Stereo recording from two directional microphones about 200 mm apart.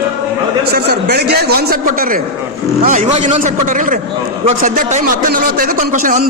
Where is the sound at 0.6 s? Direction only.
55° right (ahead or behind).